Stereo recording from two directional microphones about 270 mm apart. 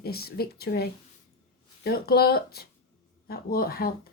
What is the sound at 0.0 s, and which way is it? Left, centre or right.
A woman's voice, left.